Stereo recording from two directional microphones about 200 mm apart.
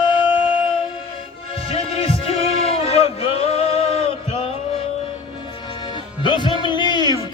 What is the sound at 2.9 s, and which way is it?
Music, 30° left (ahead or behind).